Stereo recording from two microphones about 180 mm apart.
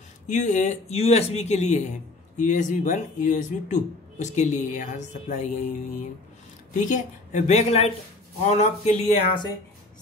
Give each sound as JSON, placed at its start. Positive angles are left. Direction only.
{"t": 0.3, "sound": "speech", "side_deg": 40}